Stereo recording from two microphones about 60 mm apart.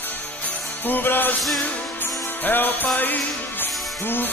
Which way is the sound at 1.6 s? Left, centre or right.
Left.